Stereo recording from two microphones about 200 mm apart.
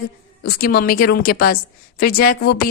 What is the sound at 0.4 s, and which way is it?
A woman's voice, 50° left (ahead or behind).